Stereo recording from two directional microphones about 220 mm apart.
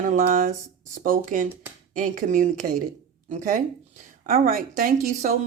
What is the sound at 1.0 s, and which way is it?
Speech, 35° right (ahead or behind).